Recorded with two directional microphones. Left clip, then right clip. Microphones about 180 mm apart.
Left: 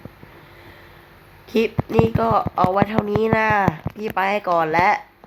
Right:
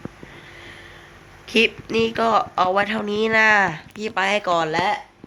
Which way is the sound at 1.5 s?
15° left (ahead or behind).